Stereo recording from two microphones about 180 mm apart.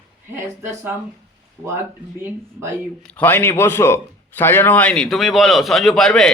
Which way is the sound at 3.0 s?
10° left (ahead or behind).